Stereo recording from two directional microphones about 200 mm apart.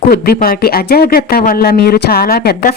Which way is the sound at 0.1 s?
50° left (ahead or behind).